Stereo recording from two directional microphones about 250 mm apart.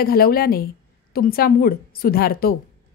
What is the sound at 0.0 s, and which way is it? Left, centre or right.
A woman's voice, left.